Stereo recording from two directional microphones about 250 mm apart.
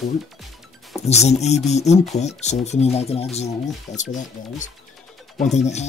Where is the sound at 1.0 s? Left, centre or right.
Left.